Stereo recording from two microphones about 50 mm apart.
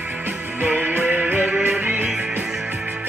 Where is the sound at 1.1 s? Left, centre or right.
Right.